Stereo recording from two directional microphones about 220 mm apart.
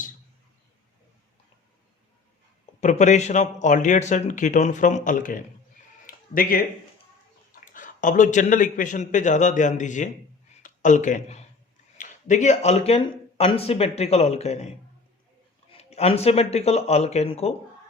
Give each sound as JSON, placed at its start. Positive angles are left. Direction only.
{"t": 2.8, "sound": "a man's voice", "side_deg": 35}
{"t": 6.1, "sound": "a sound", "side_deg": 40}
{"t": 7.5, "sound": "a man's voice", "side_deg": 40}
{"t": 15.7, "sound": "speech", "side_deg": 30}